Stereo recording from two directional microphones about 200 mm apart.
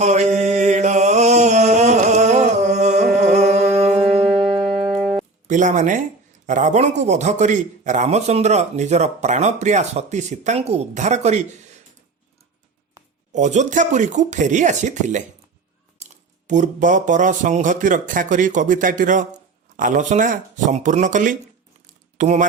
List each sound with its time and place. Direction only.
0.0 s mantra: 35° right (ahead or behind)
3.2 s music: 35° right (ahead or behind)
4.9 s guitar: centre (ahead or behind)
5.5 s a man's voice: 40° right (ahead or behind)
13.3 s a man's voice: 35° right (ahead or behind)